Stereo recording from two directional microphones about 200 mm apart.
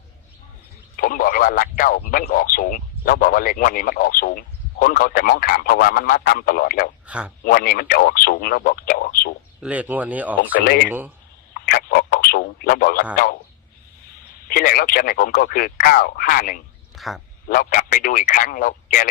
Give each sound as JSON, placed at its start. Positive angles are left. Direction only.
{"t": 0.9, "sound": "a man's voice", "side_deg": 45}
{"t": 7.1, "sound": "a man's voice", "side_deg": -5}
{"t": 7.4, "sound": "a man's voice", "side_deg": 50}
{"t": 9.6, "sound": "speech", "side_deg": -5}
{"t": 10.5, "sound": "a man's voice", "side_deg": 50}
{"t": 10.8, "sound": "speech", "side_deg": -10}
{"t": 11.6, "sound": "speech", "side_deg": 50}
{"t": 14.4, "sound": "a man's voice", "side_deg": 45}
{"t": 16.9, "sound": "speech", "side_deg": 0}
{"t": 17.5, "sound": "speech", "side_deg": 40}